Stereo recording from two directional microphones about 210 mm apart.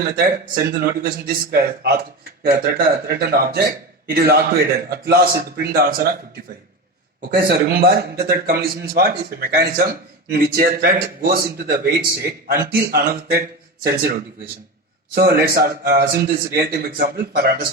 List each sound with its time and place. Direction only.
0.2 s speech: 45° right (ahead or behind)
7.3 s speech: 50° right (ahead or behind)
15.1 s speech: 45° right (ahead or behind)